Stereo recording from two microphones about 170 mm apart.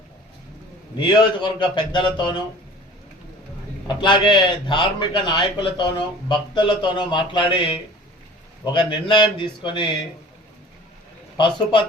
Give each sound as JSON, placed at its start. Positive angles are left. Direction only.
{"t": 0.9, "sound": "a man's voice", "side_deg": 25}
{"t": 3.8, "sound": "a man's voice", "side_deg": 25}
{"t": 11.3, "sound": "a man's voice", "side_deg": 30}